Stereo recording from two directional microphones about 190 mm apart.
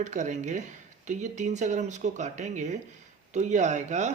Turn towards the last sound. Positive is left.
turn(degrees=-40)  # may be behind; listen again after turning